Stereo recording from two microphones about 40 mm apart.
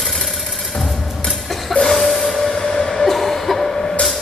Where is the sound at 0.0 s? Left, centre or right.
Centre.